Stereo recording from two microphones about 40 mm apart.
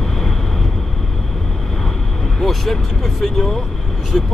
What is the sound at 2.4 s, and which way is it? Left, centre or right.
Speech, centre.